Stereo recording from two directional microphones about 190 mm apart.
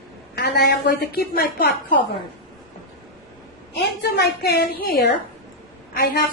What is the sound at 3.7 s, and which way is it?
A woman's voice, 60° left (ahead or behind).